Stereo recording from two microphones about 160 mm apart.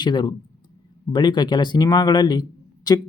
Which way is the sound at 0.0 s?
30° left (ahead or behind).